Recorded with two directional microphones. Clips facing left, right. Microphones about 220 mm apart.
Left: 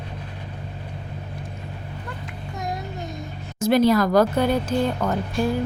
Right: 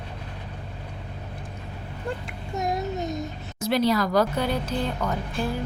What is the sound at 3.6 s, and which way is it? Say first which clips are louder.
A woman's voice: left 5 dB; 50° left (ahead or behind).